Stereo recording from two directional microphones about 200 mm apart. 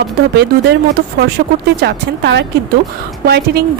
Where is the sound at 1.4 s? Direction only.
50° right (ahead or behind).